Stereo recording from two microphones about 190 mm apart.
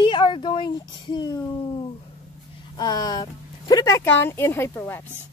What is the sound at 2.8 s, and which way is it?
Speech, 20° left (ahead or behind).